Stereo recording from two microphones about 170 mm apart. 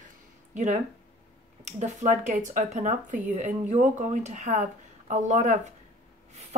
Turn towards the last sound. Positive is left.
turn(degrees=-45)  # may be behind; listen again after turning